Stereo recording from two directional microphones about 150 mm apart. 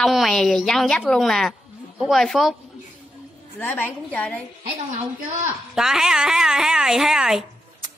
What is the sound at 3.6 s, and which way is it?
Speech, 10° left (ahead or behind).